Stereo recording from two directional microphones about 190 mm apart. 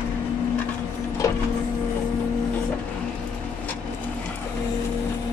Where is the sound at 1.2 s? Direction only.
15° left (ahead or behind).